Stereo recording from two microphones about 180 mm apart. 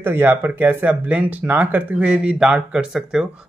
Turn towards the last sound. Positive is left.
turn(degrees=-5)  # may be behind; listen again after turning